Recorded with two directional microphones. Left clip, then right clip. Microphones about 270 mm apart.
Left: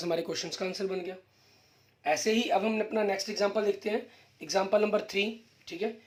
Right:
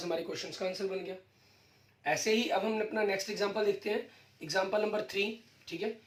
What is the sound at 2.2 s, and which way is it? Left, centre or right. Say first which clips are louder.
Speech: left 2 dB; left.